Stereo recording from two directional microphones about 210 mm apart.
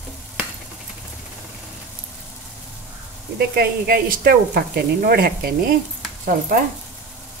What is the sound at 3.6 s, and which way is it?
A woman's voice, 45° right (ahead or behind).